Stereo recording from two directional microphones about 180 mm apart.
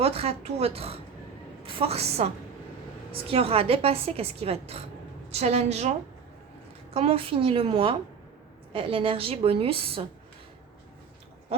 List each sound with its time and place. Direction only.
0.0 s a woman's voice: 35° right (ahead or behind)
6.9 s a woman's voice: 30° right (ahead or behind)